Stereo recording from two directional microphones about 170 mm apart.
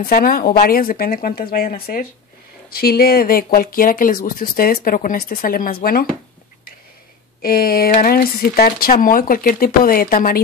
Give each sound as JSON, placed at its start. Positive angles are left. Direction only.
{"t": 0.0, "sound": "speech", "side_deg": 60}
{"t": 7.4, "sound": "speech", "side_deg": 60}